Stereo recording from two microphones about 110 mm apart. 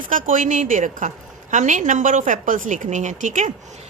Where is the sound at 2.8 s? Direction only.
90° right.